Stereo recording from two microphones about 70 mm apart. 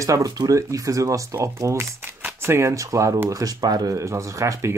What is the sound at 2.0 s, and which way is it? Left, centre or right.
Shuffling cards, right.